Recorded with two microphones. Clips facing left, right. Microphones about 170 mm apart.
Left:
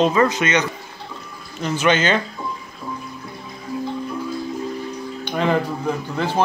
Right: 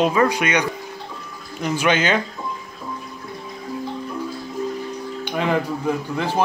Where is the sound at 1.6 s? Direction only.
10° right (ahead or behind).